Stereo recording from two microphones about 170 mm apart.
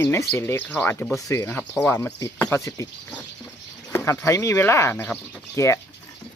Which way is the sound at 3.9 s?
15° left (ahead or behind).